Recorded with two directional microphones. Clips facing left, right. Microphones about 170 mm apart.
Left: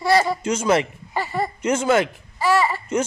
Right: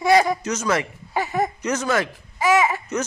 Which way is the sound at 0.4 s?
25° left (ahead or behind).